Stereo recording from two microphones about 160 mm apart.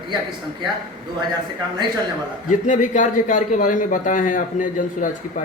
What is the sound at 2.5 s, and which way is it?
A man's voice, 55° left (ahead or behind).